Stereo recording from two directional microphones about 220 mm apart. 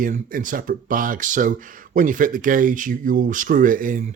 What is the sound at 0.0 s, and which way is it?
Speech, 40° right (ahead or behind).